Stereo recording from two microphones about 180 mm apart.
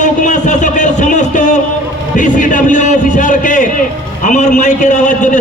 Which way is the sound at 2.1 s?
45° left (ahead or behind).